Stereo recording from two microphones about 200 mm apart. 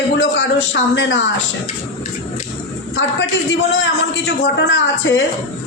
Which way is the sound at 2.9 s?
65° left (ahead or behind).